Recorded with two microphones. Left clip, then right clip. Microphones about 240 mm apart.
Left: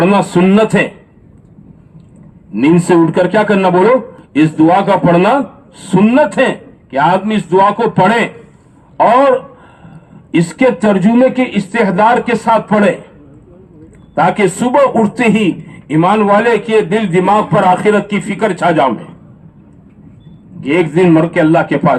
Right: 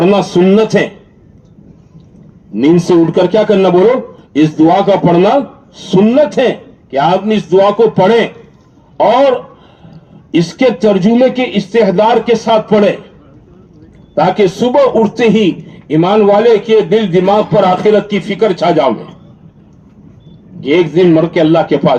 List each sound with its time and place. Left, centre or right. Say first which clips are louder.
0.0 s a man's voice: right 1 dB; left
2.6 s a man's voice: right 1 dB; left
10.3 s a man's voice: right 1 dB; left
14.2 s a man's voice: right 2 dB; left
20.6 s a man's voice: right 2 dB; left